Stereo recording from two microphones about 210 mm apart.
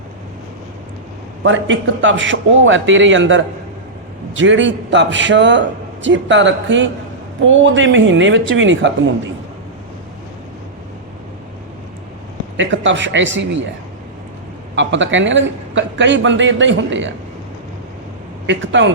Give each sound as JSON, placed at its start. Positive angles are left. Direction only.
{"t": 1.5, "sound": "a man's voice", "side_deg": -65}
{"t": 12.5, "sound": "a man's voice", "side_deg": -60}
{"t": 14.8, "sound": "a man's voice", "side_deg": -60}
{"t": 18.4, "sound": "speech", "side_deg": -60}